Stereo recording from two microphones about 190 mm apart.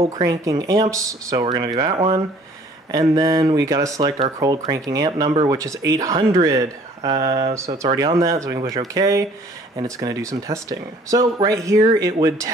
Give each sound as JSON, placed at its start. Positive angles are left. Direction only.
{"t": 0.2, "sound": "speech", "side_deg": -15}
{"t": 7.5, "sound": "speech", "side_deg": -15}